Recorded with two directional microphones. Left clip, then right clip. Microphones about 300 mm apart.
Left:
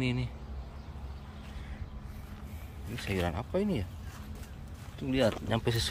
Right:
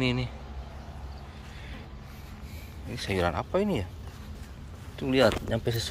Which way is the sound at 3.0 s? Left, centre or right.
Centre.